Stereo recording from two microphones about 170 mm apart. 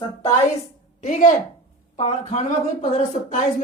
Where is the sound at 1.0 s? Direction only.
50° left (ahead or behind).